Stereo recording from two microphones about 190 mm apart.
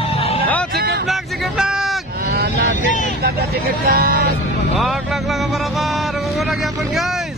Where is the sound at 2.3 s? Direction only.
55° right (ahead or behind).